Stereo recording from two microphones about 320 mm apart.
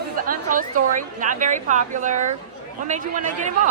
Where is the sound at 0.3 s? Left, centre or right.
Right.